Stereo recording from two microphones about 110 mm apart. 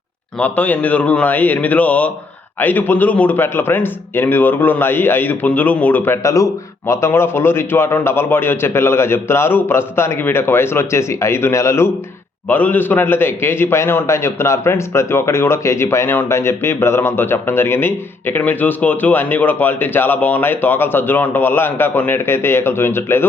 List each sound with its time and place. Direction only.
0.3 s a man's voice: 15° left (ahead or behind)